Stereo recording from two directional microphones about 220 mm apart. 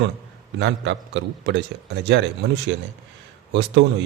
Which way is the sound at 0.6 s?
55° right (ahead or behind).